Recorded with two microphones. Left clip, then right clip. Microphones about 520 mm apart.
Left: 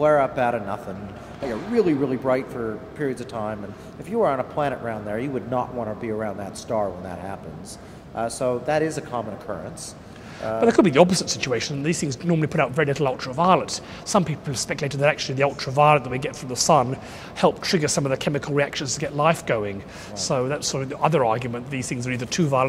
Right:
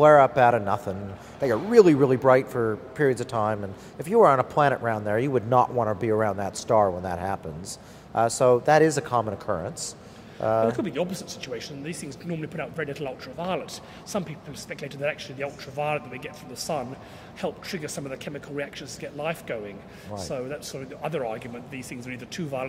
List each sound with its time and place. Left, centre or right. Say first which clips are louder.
0.0 s speech: right 3 dB; right
10.7 s speech: left 12 dB; left